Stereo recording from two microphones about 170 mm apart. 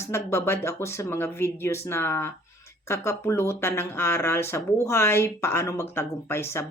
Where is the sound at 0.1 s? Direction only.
15° left (ahead or behind).